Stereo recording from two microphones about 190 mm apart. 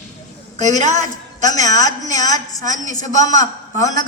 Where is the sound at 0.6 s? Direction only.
40° right (ahead or behind).